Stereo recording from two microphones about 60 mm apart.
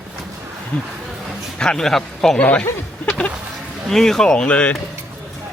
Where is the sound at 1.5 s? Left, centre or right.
Centre.